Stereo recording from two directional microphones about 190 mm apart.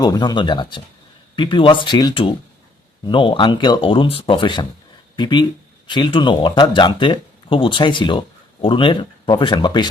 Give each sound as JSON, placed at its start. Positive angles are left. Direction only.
{"t": 0.0, "sound": "speech", "side_deg": 20}